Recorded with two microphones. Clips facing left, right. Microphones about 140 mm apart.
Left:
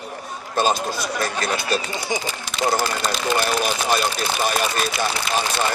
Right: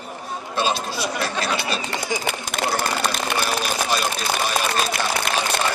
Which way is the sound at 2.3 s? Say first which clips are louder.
Left 4 dB; 60° right (ahead or behind).